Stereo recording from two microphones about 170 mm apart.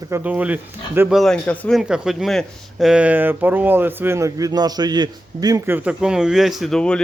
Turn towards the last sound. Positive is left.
turn(degrees=5)  # may be behind; listen again after turning